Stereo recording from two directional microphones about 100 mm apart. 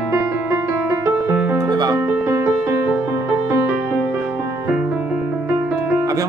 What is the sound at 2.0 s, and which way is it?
Music, 25° right (ahead or behind).